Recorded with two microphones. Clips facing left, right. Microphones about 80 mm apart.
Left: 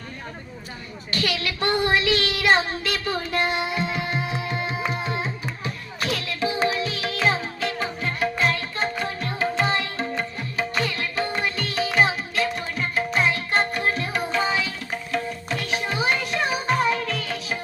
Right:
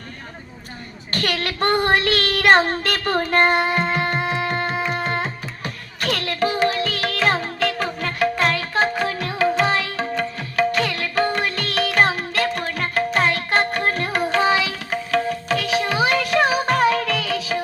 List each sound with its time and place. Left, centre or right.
1.1 s child singing: right
6.7 s music: right